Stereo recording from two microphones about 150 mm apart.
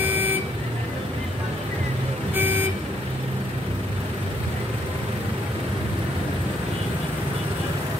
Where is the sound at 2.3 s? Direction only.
10° right (ahead or behind).